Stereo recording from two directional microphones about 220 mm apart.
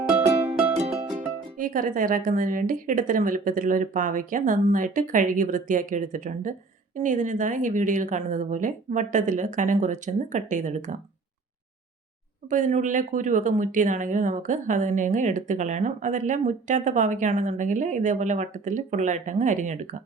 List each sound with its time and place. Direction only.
1.5 s speech: 40° right (ahead or behind)
12.5 s speech: 35° right (ahead or behind)